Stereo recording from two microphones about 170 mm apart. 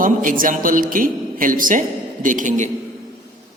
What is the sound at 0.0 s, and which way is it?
A woman's voice, 50° right (ahead or behind).